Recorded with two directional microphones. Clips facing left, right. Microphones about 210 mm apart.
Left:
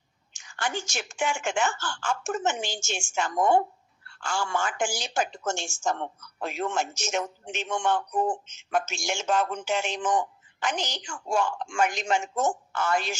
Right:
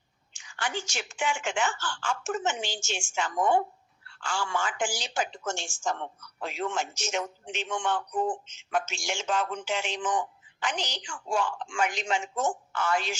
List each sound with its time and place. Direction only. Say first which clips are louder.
0.3 s a woman's voice: left 2 dB; 45° left (ahead or behind)